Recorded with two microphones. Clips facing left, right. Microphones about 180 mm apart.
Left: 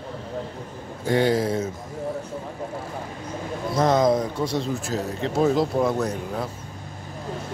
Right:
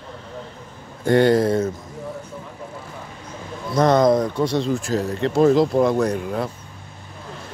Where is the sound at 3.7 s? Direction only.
5° left (ahead or behind).